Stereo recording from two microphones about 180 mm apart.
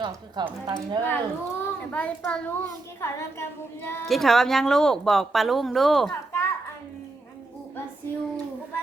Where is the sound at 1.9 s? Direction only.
5° left (ahead or behind).